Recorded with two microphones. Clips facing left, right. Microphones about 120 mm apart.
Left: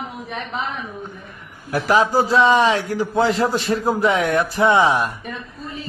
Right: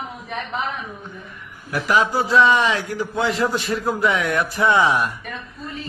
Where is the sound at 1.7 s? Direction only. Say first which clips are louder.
Left 3 dB; 35° left (ahead or behind).